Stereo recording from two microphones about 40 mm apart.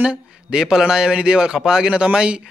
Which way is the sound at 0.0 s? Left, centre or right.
Right.